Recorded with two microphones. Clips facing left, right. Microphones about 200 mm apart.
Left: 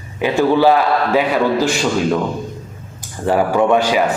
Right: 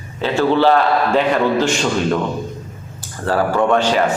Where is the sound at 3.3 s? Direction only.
15° left (ahead or behind).